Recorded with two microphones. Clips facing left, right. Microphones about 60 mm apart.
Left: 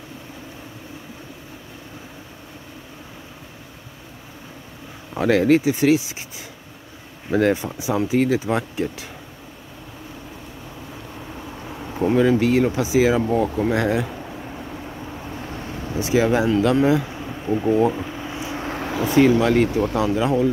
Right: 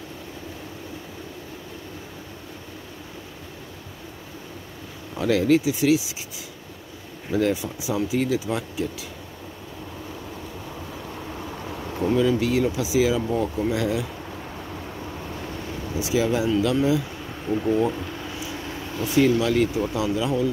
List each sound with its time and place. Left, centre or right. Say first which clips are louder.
5.1 s speech: left 3 dB; left
7.3 s speech: left 4 dB; left
11.1 s vehicle: even; centre
12.2 s speech: left 5 dB; left
14.2 s vehicle: left 2 dB; centre
16.0 s speech: left 4 dB; left
17.2 s a sound: left 3 dB; centre
18.4 s vehicle: left 5 dB; left
19.0 s speech: left 4 dB; left